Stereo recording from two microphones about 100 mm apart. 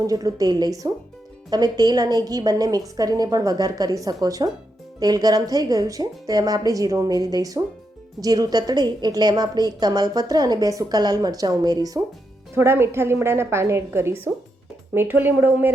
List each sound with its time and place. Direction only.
0.0 s a woman's voice: 35° right (ahead or behind)
12.5 s a woman's voice: 25° right (ahead or behind)